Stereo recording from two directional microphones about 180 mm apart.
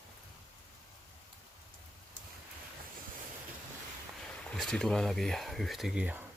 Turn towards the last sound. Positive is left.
turn(degrees=-10)  # may be behind; listen again after turning